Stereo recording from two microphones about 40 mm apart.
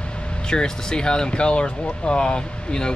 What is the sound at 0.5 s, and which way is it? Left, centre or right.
Speech, centre.